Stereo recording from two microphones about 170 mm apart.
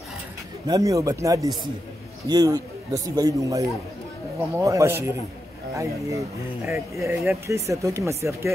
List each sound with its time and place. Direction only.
0.7 s a man's voice: 20° right (ahead or behind)